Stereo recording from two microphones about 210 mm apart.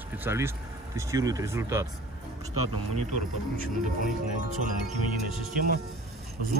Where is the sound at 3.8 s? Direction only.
40° right (ahead or behind).